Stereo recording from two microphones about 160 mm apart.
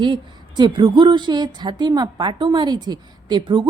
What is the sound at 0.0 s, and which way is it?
Speech, 30° right (ahead or behind).